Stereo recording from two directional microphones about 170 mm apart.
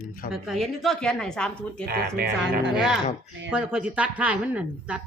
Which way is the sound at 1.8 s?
60° right (ahead or behind).